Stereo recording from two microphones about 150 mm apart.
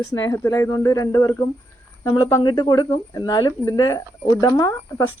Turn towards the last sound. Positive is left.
turn(degrees=25)  # may be behind; listen again after turning